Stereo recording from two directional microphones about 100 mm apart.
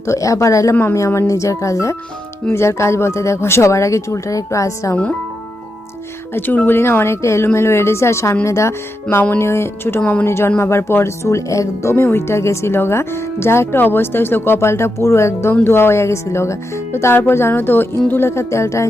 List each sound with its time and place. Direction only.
0.0 s speech: 30° left (ahead or behind)
6.3 s speech: 20° left (ahead or behind)
9.0 s speech: 15° left (ahead or behind)
10.0 s speech: 15° left (ahead or behind)
10.2 s speech: 25° left (ahead or behind)